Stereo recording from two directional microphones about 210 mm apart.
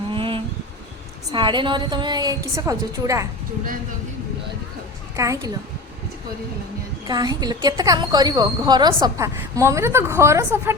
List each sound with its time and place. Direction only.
0.1 s a sound: 25° right (ahead or behind)
1.3 s a woman's voice: 20° right (ahead or behind)
5.1 s a woman's voice: 15° right (ahead or behind)
7.1 s a woman's voice: 20° right (ahead or behind)